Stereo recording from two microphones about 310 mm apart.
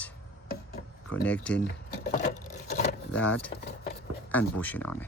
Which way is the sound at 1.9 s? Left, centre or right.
Left.